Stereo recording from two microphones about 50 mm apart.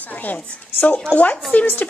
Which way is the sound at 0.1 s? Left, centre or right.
Left.